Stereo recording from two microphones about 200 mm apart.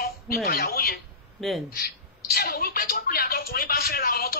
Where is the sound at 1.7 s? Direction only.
50° left (ahead or behind).